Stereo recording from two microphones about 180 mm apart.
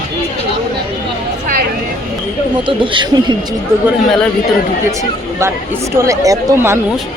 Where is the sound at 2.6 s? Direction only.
25° right (ahead or behind).